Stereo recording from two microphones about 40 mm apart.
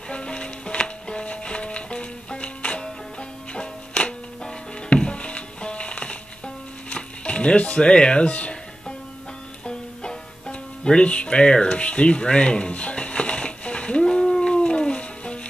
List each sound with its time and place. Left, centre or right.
0.1 s music: left
9.7 s music: left